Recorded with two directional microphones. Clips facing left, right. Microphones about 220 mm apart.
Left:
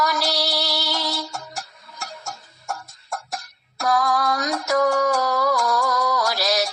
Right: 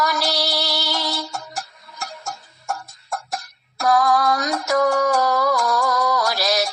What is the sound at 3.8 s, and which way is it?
Music, 55° right (ahead or behind).